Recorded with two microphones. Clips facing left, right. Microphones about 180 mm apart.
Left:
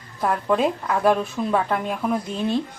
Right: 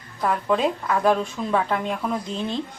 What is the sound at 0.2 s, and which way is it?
Speech, 5° left (ahead or behind).